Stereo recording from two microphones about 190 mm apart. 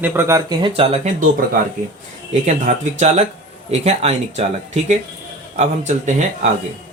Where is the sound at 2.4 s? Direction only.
40° right (ahead or behind).